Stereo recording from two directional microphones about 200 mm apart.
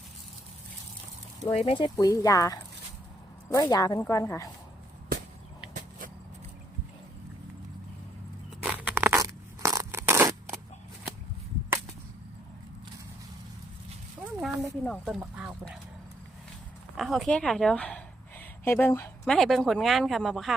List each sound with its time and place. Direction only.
1.5 s speech: 30° left (ahead or behind)
8.6 s crushing: 10° right (ahead or behind)
14.4 s speech: centre (ahead or behind)
17.0 s speech: centre (ahead or behind)